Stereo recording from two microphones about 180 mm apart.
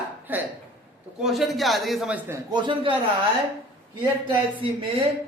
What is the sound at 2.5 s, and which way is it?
Speech, 25° right (ahead or behind).